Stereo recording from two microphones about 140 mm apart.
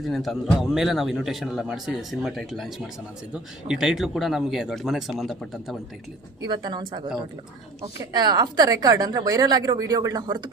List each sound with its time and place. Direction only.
0.0 s a man's voice: centre (ahead or behind)
6.4 s a woman's voice: 30° right (ahead or behind)